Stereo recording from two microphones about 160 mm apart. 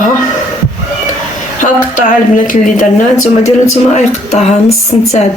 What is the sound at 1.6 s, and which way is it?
Speech, 55° left (ahead or behind).